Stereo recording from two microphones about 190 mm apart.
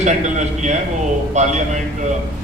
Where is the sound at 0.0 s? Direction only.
40° right (ahead or behind).